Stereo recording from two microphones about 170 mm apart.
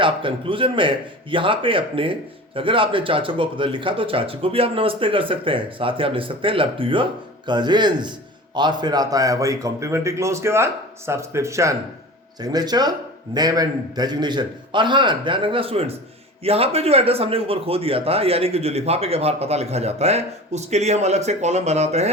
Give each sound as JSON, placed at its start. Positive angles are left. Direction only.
{"t": 0.0, "sound": "a man's voice", "side_deg": -30}